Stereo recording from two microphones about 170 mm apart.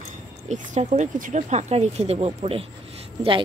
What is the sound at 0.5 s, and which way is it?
Speech, 45° right (ahead or behind).